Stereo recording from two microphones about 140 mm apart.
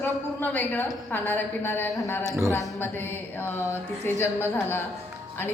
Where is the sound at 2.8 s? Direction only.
15° left (ahead or behind).